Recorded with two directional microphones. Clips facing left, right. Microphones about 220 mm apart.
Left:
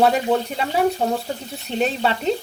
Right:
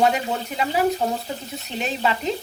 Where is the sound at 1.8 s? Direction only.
35° left (ahead or behind).